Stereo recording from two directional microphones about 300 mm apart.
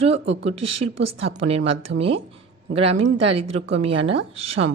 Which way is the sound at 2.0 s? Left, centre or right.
Centre.